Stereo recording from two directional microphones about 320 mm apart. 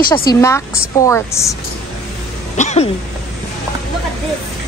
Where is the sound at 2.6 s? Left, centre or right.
Left.